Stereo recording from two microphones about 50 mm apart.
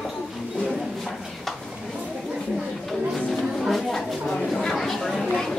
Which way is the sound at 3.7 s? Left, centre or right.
Centre.